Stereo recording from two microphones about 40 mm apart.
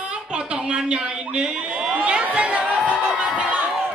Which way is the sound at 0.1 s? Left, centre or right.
Centre.